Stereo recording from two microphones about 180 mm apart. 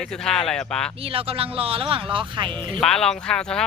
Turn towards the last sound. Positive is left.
turn(degrees=5)  # may be behind; listen again after turning